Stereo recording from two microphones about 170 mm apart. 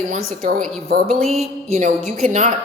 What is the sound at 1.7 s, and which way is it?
Speech, 45° right (ahead or behind).